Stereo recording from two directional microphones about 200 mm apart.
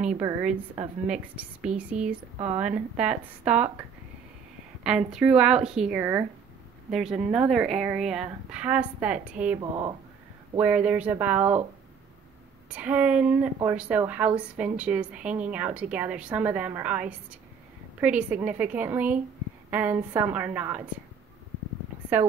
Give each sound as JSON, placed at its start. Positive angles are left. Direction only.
{"t": 1.0, "sound": "a woman's voice", "side_deg": -5}
{"t": 2.3, "sound": "a woman's voice", "side_deg": -35}
{"t": 3.0, "sound": "a woman's voice", "side_deg": -5}
{"t": 4.8, "sound": "a woman's voice", "side_deg": -5}
{"t": 9.6, "sound": "speech", "side_deg": -20}
{"t": 10.5, "sound": "a woman's voice", "side_deg": -5}
{"t": 12.7, "sound": "a woman's voice", "side_deg": -5}